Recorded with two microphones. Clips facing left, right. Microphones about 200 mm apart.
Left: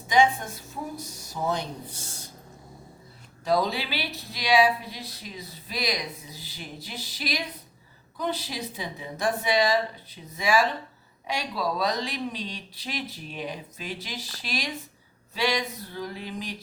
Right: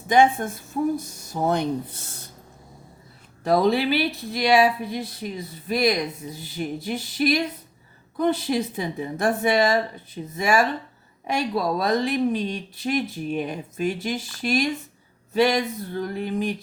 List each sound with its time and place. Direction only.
0.1 s speech: 55° right (ahead or behind)
3.4 s speech: 55° right (ahead or behind)